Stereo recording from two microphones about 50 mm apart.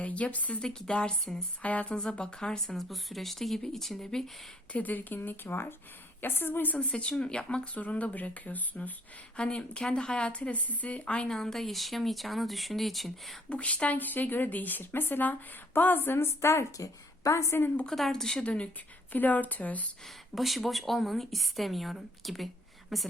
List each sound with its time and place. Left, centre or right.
0.0 s speech: left
0.6 s speech: centre
1.6 s speech: left
2.7 s speech: centre
4.7 s speech: left
7.1 s speech: centre
11.3 s speech: centre
13.5 s speech: left
17.9 s speech: centre
18.4 s speech: left
19.1 s speech: left
20.3 s speech: centre